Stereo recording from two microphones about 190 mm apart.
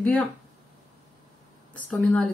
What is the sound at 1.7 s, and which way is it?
Speech, 5° left (ahead or behind).